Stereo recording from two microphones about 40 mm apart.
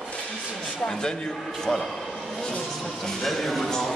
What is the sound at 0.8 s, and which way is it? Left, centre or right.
A man's voice, centre.